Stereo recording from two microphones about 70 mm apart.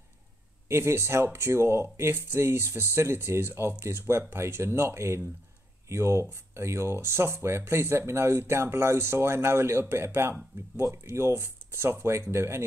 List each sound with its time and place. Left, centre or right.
0.7 s speech: right